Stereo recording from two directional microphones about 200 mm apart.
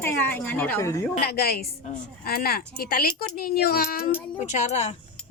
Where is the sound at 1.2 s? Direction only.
50° left (ahead or behind).